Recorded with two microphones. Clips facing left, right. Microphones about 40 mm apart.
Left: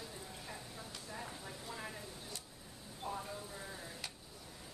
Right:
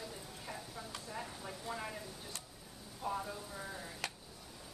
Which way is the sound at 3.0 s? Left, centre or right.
Centre.